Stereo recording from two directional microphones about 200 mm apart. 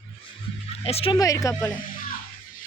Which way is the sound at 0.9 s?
30° left (ahead or behind).